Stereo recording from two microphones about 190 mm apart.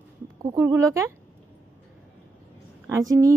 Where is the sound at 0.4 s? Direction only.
15° right (ahead or behind).